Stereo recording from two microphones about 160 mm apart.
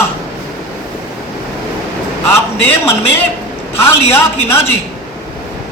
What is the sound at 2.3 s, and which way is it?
Speech, 15° left (ahead or behind).